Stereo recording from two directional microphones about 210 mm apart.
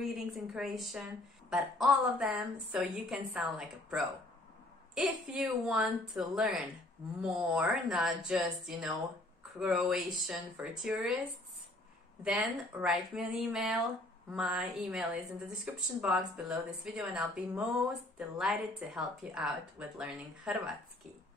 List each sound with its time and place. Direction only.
0.0 s a woman's voice: centre (ahead or behind)
12.2 s a woman's voice: 5° right (ahead or behind)